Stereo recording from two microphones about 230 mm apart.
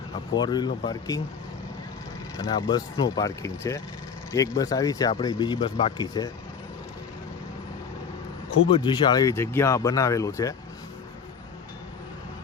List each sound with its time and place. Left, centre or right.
0.3 s speech: centre
2.4 s speech: centre
8.7 s speech: left